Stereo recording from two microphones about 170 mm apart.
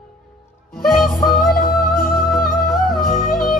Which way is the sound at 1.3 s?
55° left (ahead or behind).